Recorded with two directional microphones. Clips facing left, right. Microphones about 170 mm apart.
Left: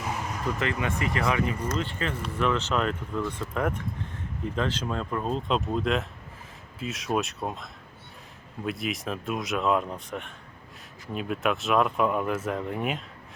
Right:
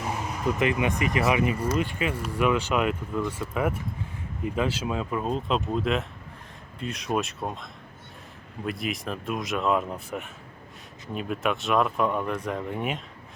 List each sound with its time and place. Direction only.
0.4 s speech: 15° right (ahead or behind); by 13.0 s centre (ahead or behind)